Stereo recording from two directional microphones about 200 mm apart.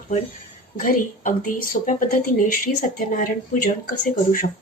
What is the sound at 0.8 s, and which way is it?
Speech, 45° left (ahead or behind).